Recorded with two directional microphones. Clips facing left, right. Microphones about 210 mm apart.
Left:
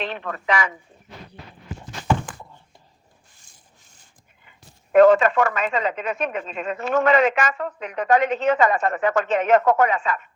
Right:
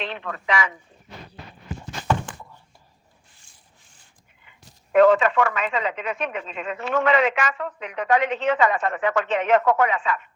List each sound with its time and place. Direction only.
0.0 s speech: 45° left (ahead or behind)
4.4 s speech: 45° left (ahead or behind)